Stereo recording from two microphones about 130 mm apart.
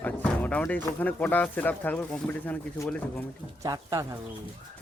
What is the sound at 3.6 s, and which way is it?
Speech, 30° right (ahead or behind).